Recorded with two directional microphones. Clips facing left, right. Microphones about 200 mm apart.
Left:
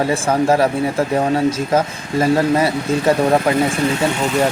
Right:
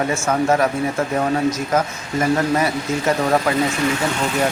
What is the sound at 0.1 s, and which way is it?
Speech, 30° left (ahead or behind).